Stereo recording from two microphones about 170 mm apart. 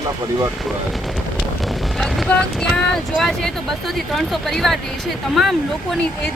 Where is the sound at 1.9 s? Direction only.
Centre (ahead or behind).